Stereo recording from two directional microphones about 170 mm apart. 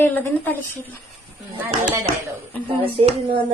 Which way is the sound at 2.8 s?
35° right (ahead or behind).